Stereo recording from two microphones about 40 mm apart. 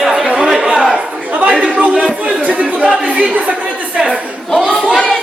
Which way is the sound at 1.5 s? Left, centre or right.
Centre.